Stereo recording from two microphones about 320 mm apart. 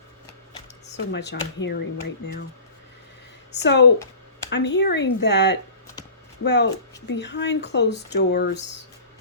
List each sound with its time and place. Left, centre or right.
0.9 s speech: left
3.6 s speech: left